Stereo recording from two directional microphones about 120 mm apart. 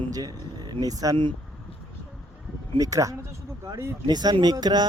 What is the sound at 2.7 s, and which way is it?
Speech, 30° right (ahead or behind).